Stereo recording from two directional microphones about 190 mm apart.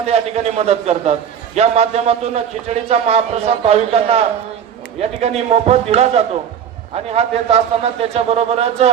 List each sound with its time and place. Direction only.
0.0 s a man's voice: 35° right (ahead or behind)